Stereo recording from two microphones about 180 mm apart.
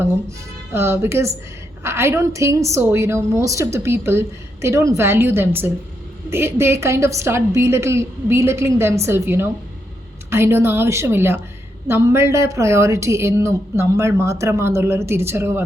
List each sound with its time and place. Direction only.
0.0 s a woman's voice: 15° right (ahead or behind)